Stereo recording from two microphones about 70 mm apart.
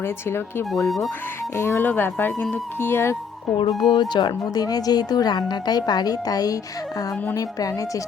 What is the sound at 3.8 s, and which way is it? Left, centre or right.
Speech, left.